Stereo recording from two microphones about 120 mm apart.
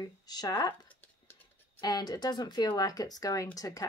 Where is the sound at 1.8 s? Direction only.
35° left (ahead or behind).